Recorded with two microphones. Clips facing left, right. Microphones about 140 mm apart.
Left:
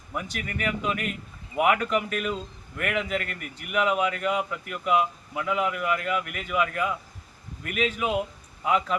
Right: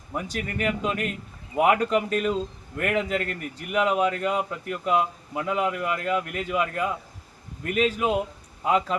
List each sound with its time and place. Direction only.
0.1 s a man's voice: 35° right (ahead or behind)